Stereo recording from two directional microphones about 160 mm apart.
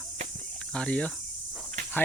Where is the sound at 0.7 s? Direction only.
5° left (ahead or behind).